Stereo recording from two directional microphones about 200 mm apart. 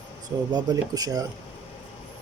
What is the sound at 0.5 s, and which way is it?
Speech, 20° right (ahead or behind).